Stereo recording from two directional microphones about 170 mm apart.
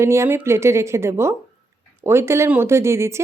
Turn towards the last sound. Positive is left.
turn(degrees=-15)  # may be behind; listen again after turning